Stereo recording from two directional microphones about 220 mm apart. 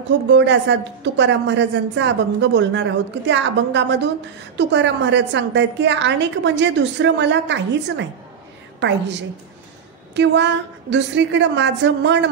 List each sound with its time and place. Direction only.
0.3 s a woman's voice: 55° right (ahead or behind)